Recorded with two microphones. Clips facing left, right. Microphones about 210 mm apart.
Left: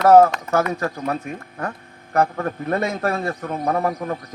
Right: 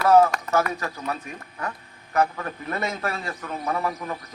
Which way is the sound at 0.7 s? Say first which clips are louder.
Left 6 dB; 45° left (ahead or behind).